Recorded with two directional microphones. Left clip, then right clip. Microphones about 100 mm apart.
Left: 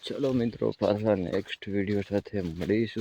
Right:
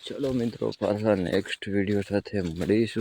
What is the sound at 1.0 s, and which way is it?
Speech, 30° right (ahead or behind).